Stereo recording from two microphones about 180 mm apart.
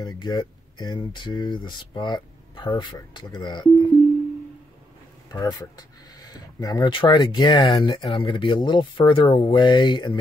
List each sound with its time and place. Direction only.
0.0 s speech: 25° left (ahead or behind)
5.3 s speech: 20° left (ahead or behind)